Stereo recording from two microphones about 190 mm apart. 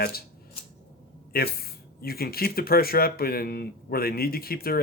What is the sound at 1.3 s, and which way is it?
Speech, 55° left (ahead or behind).